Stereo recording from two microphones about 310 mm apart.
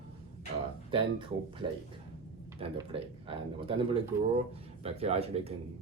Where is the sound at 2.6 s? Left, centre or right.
Centre.